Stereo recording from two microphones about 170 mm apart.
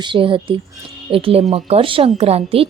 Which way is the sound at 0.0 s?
30° right (ahead or behind).